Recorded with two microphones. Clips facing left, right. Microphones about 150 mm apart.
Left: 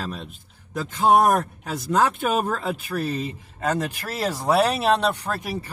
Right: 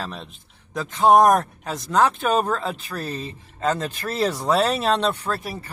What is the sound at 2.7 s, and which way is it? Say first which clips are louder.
Speech: left 4 dB; 10° left (ahead or behind).